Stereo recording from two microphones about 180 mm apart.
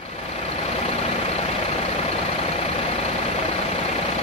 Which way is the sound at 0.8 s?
35° left (ahead or behind).